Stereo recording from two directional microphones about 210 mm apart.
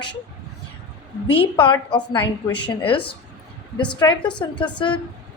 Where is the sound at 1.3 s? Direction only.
25° left (ahead or behind).